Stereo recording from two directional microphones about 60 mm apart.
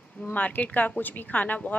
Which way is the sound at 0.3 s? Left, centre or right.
Left.